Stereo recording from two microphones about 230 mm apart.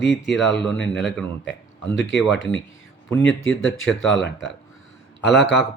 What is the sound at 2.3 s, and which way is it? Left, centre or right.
Speech, left.